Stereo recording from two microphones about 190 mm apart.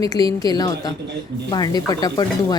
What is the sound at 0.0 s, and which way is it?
A woman's voice, 20° left (ahead or behind).